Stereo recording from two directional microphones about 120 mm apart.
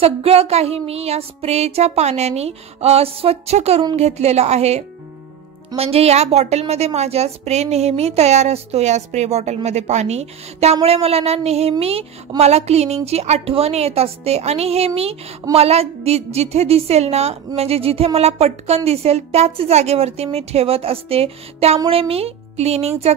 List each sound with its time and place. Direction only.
0.0 s a woman's voice: 55° right (ahead or behind)